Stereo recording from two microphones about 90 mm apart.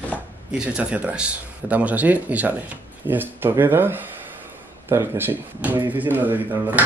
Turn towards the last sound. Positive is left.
turn(degrees=-20)  # may be behind; listen again after turning